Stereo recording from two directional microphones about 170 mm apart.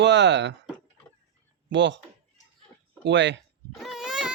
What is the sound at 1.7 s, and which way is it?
Speech, 90° right.